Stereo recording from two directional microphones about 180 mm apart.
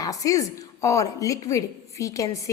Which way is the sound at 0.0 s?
20° left (ahead or behind).